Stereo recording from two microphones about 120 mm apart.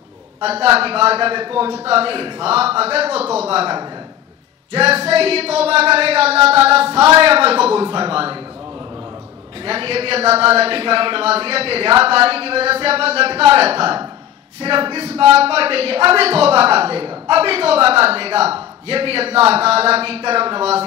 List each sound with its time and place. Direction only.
0.4 s speech: 55° right (ahead or behind)
4.7 s speech: 55° right (ahead or behind)
9.7 s speech: 55° right (ahead or behind)